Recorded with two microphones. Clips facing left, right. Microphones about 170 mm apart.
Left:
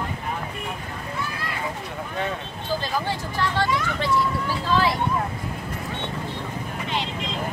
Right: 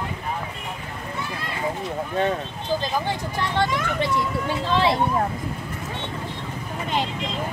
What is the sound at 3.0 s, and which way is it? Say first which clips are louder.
Vehicle: even; 20° right (ahead or behind).